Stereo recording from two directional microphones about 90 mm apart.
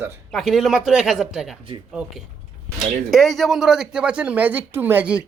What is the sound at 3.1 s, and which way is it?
Speech, centre (ahead or behind).